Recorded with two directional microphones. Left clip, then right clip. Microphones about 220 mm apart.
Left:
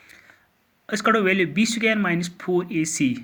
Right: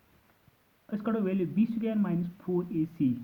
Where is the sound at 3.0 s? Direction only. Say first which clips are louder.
Left 5 dB; 50° left (ahead or behind).